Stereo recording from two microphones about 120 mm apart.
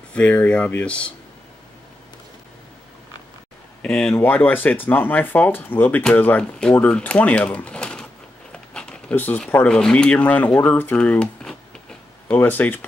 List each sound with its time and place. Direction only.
0.1 s speech: 10° left (ahead or behind)
3.8 s speech: 10° left (ahead or behind)